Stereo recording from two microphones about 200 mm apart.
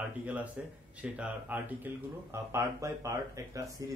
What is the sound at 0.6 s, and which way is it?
Speech, 5° right (ahead or behind).